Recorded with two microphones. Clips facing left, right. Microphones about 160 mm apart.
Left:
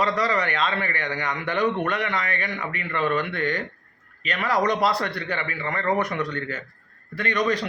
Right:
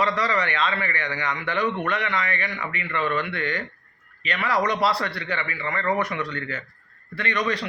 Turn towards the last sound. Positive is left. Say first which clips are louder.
# left 2 dB
turn(degrees=40)  # may be behind; listen again after turning